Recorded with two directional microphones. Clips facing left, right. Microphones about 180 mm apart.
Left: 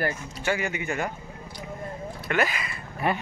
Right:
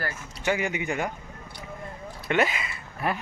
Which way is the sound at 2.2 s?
25° right (ahead or behind).